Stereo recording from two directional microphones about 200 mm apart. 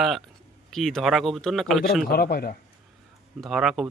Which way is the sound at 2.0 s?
50° left (ahead or behind).